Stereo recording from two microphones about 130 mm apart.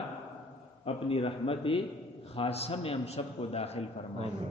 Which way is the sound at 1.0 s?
45° left (ahead or behind).